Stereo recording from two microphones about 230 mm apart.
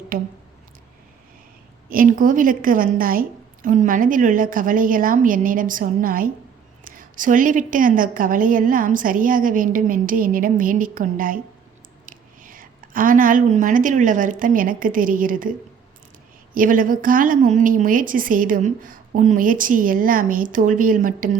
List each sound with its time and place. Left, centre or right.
0.1 s a woman's voice: right
1.9 s a woman's voice: right
16.6 s a woman's voice: right